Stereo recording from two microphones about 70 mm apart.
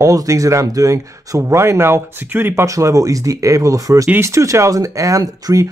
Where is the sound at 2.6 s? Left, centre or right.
Right.